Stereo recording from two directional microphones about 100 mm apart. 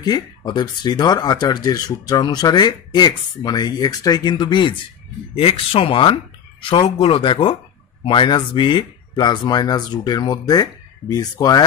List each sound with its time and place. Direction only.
0.0 s speech: 45° left (ahead or behind)
5.3 s speech: 65° left (ahead or behind); by 11.6 s 40° left (ahead or behind)